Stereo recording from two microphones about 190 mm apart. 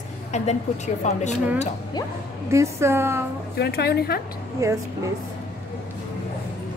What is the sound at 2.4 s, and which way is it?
Speech, 15° right (ahead or behind).